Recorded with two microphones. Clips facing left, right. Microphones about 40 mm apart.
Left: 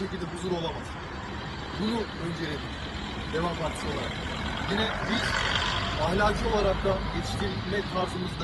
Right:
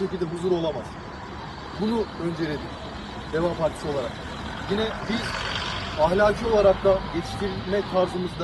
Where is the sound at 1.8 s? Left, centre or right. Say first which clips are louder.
Right 5 dB; left.